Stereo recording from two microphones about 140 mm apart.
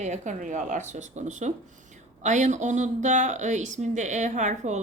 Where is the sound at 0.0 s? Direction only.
60° right (ahead or behind).